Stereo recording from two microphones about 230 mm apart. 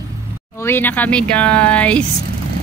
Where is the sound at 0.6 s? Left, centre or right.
Centre.